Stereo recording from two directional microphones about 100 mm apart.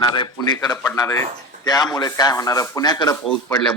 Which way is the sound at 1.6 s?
45° left (ahead or behind).